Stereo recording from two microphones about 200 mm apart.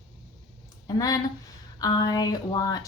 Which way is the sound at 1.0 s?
15° left (ahead or behind).